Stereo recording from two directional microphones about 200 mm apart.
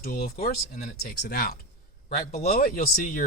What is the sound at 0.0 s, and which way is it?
Speech, 50° left (ahead or behind).